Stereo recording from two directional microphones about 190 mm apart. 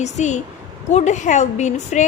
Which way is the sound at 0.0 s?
40° left (ahead or behind).